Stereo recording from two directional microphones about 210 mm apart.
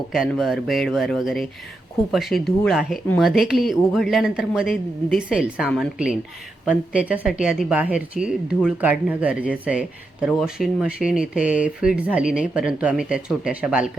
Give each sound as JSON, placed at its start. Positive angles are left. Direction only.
{"t": 0.1, "sound": "speech", "side_deg": 0}